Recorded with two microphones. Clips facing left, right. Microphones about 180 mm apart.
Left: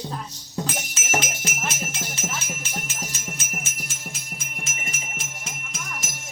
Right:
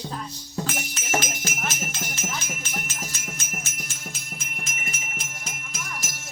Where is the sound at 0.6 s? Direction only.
Centre (ahead or behind).